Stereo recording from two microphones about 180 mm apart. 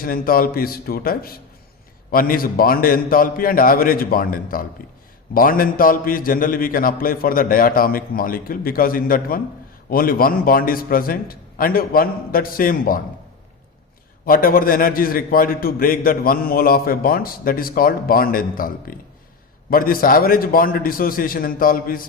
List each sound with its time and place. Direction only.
0.0 s a man's voice: 55° left (ahead or behind)
14.3 s a man's voice: 50° left (ahead or behind)